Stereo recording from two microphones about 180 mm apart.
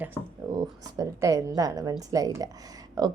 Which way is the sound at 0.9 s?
20° right (ahead or behind).